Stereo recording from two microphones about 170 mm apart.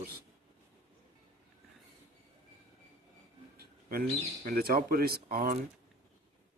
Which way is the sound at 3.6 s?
60° right (ahead or behind).